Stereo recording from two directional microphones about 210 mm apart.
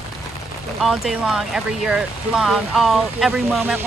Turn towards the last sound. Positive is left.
turn(degrees=0)  # may be behind; listen again after turning